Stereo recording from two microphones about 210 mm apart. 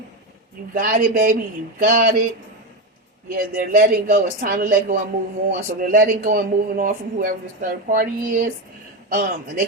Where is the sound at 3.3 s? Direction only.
45° right (ahead or behind).